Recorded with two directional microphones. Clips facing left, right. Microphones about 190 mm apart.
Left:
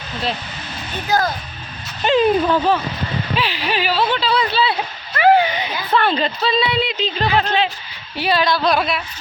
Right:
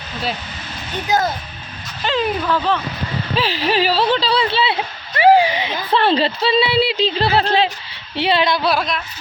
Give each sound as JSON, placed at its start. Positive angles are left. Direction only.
{"t": 1.0, "sound": "a woman's voice", "side_deg": -20}
{"t": 2.0, "sound": "speech", "side_deg": 20}
{"t": 3.3, "sound": "a woman's voice", "side_deg": -40}
{"t": 8.6, "sound": "speech", "side_deg": 0}